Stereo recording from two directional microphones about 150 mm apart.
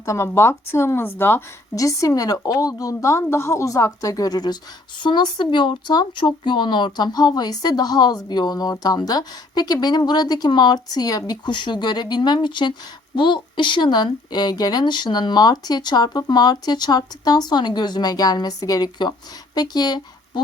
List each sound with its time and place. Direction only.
0.0 s speech: 20° left (ahead or behind)